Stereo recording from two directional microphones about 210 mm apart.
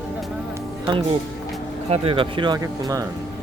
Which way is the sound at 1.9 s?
25° right (ahead or behind).